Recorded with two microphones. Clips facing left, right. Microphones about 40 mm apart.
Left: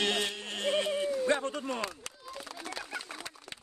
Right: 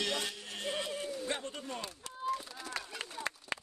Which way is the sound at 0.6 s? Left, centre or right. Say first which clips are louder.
Left 8 dB; left.